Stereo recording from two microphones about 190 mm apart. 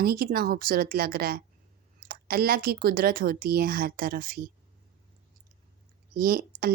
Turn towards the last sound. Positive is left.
turn(degrees=-50)  # may be behind; listen again after turning